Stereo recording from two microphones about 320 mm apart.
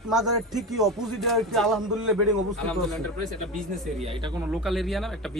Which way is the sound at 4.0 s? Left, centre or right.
Centre.